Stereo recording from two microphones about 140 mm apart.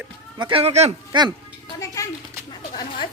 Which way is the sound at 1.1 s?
35° right (ahead or behind).